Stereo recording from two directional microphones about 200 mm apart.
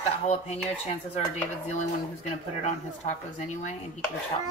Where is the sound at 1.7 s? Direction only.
35° left (ahead or behind).